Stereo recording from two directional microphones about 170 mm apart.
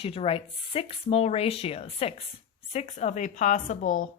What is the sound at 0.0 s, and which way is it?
Speech, 35° left (ahead or behind).